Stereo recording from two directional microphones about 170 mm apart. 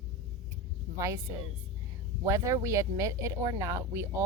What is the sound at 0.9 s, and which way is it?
Speech, 20° right (ahead or behind).